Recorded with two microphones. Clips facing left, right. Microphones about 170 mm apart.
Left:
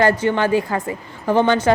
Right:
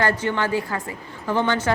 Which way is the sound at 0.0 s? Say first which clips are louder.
Left 6 dB; 15° left (ahead or behind).